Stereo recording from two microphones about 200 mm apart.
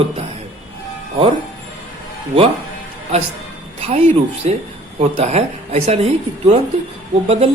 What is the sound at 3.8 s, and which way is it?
Speech, 30° right (ahead or behind).